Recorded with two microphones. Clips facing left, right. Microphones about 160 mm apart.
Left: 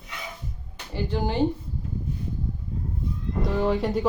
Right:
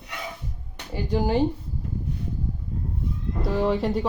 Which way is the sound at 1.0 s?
10° right (ahead or behind).